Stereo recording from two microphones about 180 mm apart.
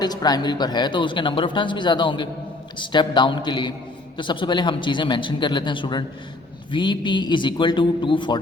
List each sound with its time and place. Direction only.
0.0 s speech: 20° left (ahead or behind)